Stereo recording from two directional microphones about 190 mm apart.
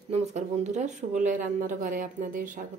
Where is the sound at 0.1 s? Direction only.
35° right (ahead or behind).